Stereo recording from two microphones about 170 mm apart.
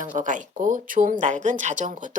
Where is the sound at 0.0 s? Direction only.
50° right (ahead or behind).